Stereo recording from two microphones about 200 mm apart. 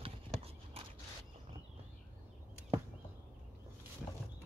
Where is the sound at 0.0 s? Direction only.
30° right (ahead or behind).